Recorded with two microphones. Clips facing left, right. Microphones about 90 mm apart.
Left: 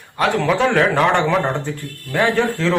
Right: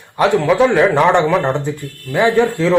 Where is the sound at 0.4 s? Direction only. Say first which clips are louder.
Right 3 dB; 15° right (ahead or behind).